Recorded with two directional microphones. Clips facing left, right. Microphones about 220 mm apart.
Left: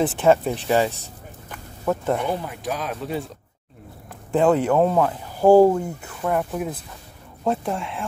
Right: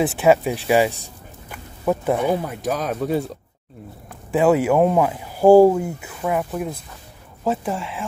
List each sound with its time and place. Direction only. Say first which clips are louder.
0.2 s speech: right 2 dB; 10° right (ahead or behind)
2.6 s speech: right 5 dB; 45° right (ahead or behind)
4.3 s speech: right 2 dB; 5° right (ahead or behind)